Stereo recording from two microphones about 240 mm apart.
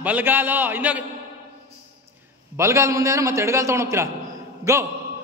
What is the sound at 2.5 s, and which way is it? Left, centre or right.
A man's voice, centre.